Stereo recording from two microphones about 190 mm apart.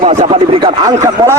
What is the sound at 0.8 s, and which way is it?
Speech, 20° right (ahead or behind).